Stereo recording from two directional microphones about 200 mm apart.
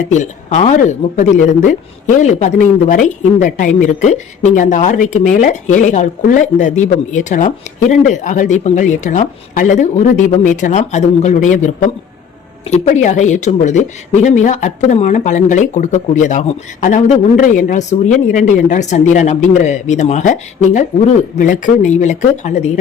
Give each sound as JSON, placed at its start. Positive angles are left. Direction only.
{"t": 0.1, "sound": "speech", "side_deg": 35}